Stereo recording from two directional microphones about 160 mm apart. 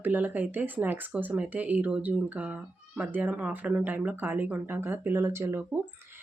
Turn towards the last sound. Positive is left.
turn(degrees=-10)  # may be behind; listen again after turning